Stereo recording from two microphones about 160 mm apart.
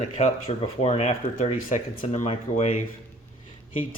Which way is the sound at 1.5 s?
55° left (ahead or behind).